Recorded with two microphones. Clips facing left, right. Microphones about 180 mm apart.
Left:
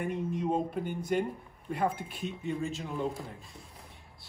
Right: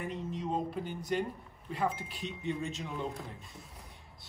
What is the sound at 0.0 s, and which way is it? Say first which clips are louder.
Speech: left 5 dB; 55° left (ahead or behind).